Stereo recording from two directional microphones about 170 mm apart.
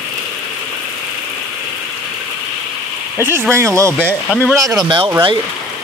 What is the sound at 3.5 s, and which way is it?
Speech, 15° right (ahead or behind).